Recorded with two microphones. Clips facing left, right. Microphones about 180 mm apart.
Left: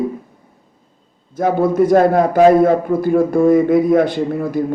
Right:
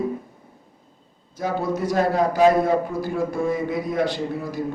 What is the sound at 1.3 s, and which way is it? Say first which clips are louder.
A man's voice: left 10 dB; 55° left (ahead or behind).